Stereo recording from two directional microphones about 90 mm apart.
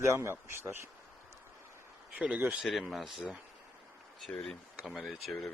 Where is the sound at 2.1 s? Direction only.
15° right (ahead or behind).